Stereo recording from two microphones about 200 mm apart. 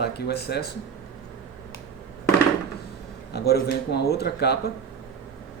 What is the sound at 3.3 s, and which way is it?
A man's voice, 55° left (ahead or behind).